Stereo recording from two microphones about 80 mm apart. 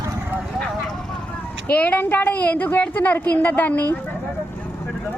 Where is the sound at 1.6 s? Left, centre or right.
Left.